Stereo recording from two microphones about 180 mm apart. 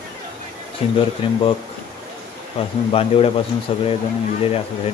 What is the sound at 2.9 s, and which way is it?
Speech, 30° left (ahead or behind).